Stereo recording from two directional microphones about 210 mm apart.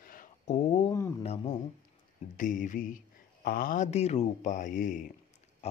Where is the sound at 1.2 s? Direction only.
30° left (ahead or behind).